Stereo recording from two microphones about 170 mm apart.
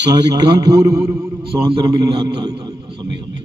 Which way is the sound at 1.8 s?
20° right (ahead or behind).